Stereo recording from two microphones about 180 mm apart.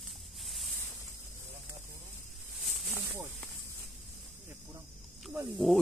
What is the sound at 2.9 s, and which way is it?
Speech, 10° right (ahead or behind).